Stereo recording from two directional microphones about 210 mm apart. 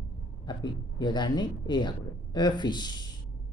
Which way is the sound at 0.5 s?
20° left (ahead or behind).